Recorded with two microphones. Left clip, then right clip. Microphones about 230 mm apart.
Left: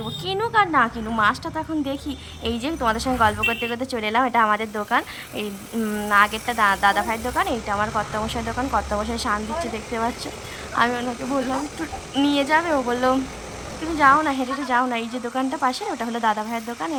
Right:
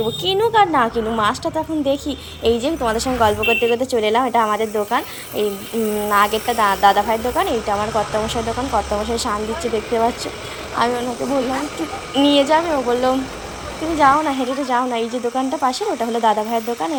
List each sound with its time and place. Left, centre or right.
0.3 s a woman's voice: centre
10.8 s speech: centre
12.1 s speech: centre